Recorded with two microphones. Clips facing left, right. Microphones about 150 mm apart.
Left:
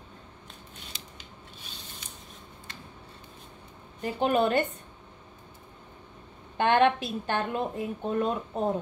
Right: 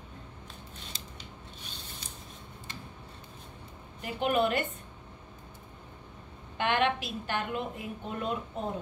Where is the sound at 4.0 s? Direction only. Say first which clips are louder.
Left 3 dB; 35° left (ahead or behind).